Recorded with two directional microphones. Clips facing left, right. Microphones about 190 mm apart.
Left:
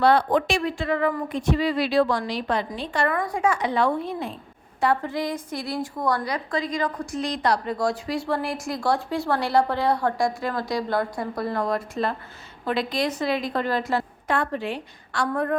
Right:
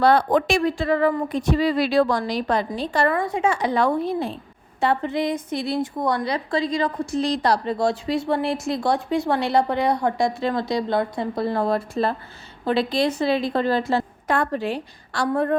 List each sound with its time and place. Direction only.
0.0 s speech: 45° right (ahead or behind)
4.8 s a woman's voice: 25° right (ahead or behind)
14.3 s speech: 40° right (ahead or behind)